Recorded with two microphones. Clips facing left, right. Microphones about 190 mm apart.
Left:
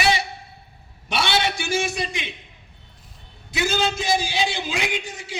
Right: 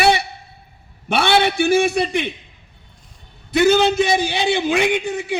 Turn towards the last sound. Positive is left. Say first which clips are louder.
# right 10 dB
turn(degrees=-60)  # may be behind; listen again after turning